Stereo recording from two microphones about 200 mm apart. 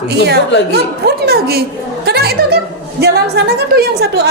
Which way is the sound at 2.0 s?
50° right (ahead or behind).